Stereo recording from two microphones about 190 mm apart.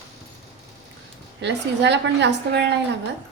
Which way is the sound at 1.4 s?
65° right (ahead or behind).